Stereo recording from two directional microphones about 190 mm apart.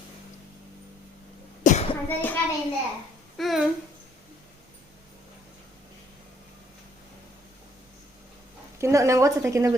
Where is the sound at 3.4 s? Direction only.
Centre (ahead or behind).